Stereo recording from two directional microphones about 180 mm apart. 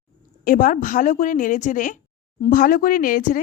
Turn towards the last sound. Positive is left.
turn(degrees=50)  # may be behind; listen again after turning